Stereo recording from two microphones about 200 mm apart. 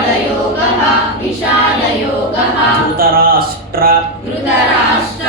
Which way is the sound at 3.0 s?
45° right (ahead or behind).